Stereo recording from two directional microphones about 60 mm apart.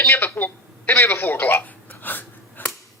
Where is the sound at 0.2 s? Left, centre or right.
Left.